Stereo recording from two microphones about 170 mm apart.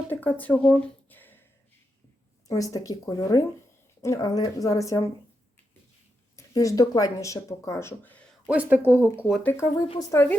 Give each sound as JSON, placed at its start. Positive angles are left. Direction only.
{"t": 0.1, "sound": "a sound", "side_deg": 10}
{"t": 2.5, "sound": "speech", "side_deg": 20}
{"t": 6.3, "sound": "speech", "side_deg": 20}
{"t": 8.4, "sound": "speech", "side_deg": -10}
{"t": 9.4, "sound": "a woman's voice", "side_deg": 10}
{"t": 9.7, "sound": "a woman's voice", "side_deg": 35}
{"t": 10.0, "sound": "a woman's voice", "side_deg": 15}